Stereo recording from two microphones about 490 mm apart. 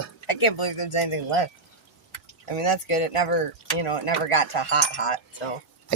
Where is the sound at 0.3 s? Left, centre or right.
Left.